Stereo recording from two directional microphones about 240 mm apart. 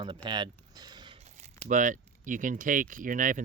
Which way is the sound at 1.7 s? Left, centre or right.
Right.